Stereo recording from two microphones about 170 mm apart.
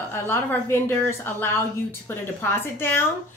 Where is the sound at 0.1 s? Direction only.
15° left (ahead or behind).